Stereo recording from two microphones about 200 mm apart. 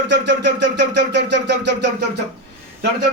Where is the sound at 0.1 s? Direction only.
60° right (ahead or behind).